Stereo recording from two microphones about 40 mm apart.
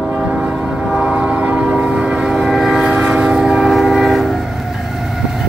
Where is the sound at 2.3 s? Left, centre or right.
Centre.